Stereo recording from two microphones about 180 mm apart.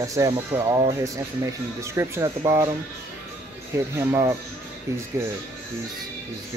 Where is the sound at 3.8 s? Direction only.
15° right (ahead or behind).